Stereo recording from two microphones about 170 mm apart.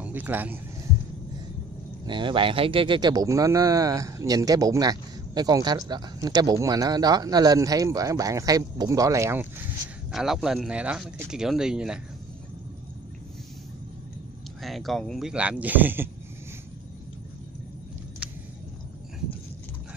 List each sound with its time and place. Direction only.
0.0 s speech: 10° right (ahead or behind)
2.0 s speech: 30° right (ahead or behind); by 9.7 s 15° right (ahead or behind)
10.1 s speech: centre (ahead or behind)
14.6 s speech: centre (ahead or behind)